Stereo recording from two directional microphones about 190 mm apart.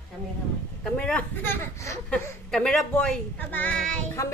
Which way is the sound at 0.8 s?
5° left (ahead or behind).